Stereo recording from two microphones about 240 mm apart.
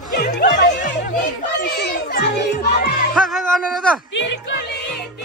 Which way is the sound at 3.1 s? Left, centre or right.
Centre.